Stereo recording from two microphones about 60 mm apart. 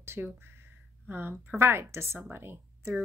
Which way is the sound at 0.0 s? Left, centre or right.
Right.